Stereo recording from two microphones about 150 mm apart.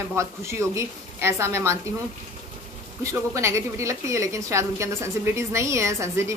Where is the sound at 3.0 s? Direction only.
20° right (ahead or behind).